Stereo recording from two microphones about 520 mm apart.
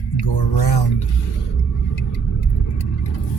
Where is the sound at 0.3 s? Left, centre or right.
Left.